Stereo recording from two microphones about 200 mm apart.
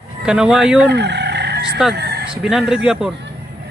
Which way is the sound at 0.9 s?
55° right (ahead or behind).